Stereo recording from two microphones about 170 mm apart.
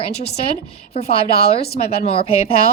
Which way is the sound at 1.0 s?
35° left (ahead or behind).